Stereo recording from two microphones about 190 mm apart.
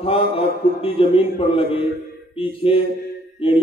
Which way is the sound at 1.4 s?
30° left (ahead or behind).